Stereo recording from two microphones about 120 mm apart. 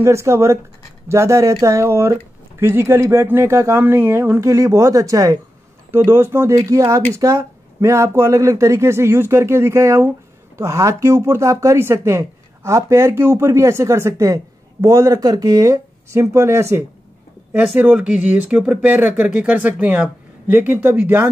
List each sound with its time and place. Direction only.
0.0 s speech: 25° right (ahead or behind)
17.7 s speech: 10° right (ahead or behind)